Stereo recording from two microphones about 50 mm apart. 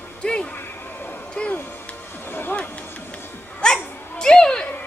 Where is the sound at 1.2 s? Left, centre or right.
Left.